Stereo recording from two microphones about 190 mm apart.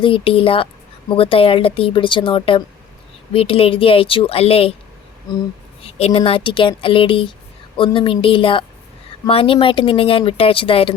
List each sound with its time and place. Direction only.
0.0 s a woman's voice: 30° left (ahead or behind)
5.8 s a woman's voice: 30° left (ahead or behind)